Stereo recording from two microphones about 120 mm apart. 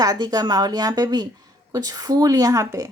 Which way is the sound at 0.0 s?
30° right (ahead or behind).